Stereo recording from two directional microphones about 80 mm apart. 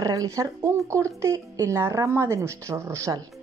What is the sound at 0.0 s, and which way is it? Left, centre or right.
A woman's voice, right.